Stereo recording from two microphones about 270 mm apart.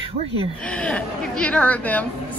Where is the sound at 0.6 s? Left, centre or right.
Centre.